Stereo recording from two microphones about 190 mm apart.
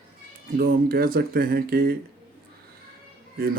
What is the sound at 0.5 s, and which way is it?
Speech, 50° right (ahead or behind).